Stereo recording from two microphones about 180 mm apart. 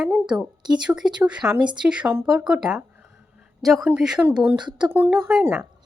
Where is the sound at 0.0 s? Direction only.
5° right (ahead or behind).